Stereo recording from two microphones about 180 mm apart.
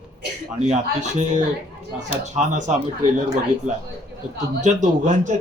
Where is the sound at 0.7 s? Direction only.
40° right (ahead or behind).